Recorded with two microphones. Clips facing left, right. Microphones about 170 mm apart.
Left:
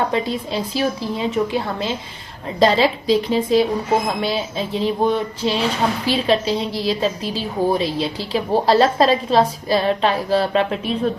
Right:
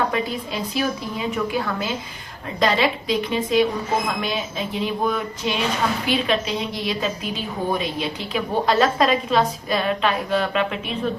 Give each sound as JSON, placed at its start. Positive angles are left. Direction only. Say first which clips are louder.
{"t": 0.1, "sound": "a woman's voice", "louder": "left 3 dB", "side_deg": 30}